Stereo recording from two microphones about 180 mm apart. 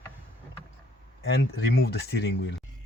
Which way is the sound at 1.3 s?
70° left (ahead or behind).